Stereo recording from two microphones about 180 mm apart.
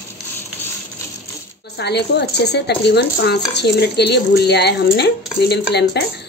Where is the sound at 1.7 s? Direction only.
70° left (ahead or behind).